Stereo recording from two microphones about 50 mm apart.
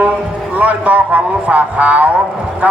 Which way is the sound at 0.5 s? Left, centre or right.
Right.